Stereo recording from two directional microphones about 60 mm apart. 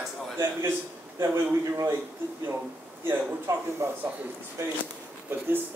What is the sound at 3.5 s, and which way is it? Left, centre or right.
Speech, right.